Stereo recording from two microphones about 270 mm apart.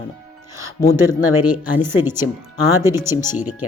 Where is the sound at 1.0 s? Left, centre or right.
Centre.